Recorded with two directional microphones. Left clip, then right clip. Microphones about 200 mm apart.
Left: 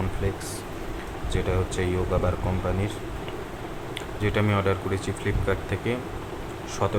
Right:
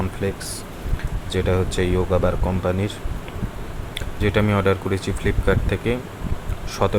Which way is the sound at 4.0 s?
25° right (ahead or behind).